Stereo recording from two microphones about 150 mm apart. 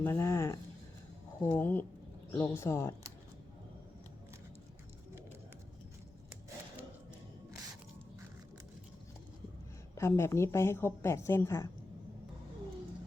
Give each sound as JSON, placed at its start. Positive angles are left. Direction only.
{"t": 0.0, "sound": "a woman's voice", "side_deg": 15}
{"t": 9.9, "sound": "a woman's voice", "side_deg": 20}